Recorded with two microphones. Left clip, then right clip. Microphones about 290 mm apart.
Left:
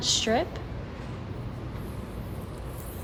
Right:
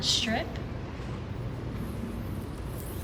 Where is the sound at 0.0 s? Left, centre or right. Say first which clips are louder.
Left 3 dB; centre.